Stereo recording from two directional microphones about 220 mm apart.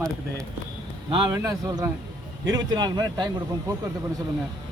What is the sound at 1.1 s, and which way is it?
A man's voice, 15° right (ahead or behind).